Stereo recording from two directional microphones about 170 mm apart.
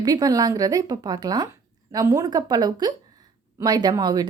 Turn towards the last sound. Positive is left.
turn(degrees=-25)  # may be behind; listen again after turning